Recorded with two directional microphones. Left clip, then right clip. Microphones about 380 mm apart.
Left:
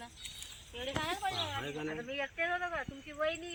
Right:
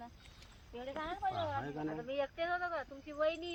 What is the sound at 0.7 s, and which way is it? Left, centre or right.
Speech, centre.